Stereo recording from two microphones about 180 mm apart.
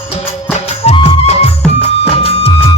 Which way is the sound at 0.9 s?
35° left (ahead or behind).